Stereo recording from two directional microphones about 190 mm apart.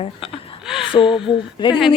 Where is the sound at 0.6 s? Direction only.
5° right (ahead or behind).